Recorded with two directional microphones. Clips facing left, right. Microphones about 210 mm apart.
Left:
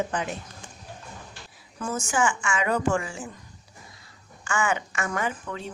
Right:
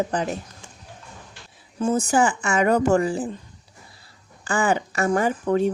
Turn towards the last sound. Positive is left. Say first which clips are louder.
# right 11 dB
turn(degrees=-45)  # may be behind; listen again after turning